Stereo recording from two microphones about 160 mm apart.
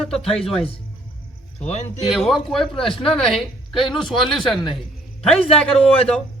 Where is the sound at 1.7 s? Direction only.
45° left (ahead or behind).